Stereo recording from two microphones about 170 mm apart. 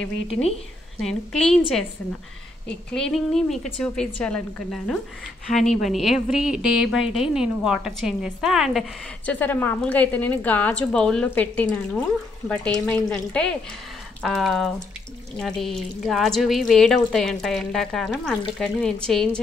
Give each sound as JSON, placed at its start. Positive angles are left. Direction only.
{"t": 0.3, "sound": "a woman's voice", "side_deg": 35}
{"t": 1.0, "sound": "a woman's voice", "side_deg": 5}
{"t": 2.9, "sound": "a woman's voice", "side_deg": 5}
{"t": 9.2, "sound": "a woman's voice", "side_deg": 10}